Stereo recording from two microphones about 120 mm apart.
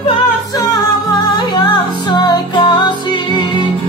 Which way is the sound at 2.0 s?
40° left (ahead or behind).